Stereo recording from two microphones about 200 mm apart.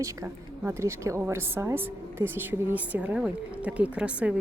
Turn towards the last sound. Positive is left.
turn(degrees=-5)  # may be behind; listen again after turning